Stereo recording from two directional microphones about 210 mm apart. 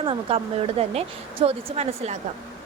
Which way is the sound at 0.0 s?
25° right (ahead or behind).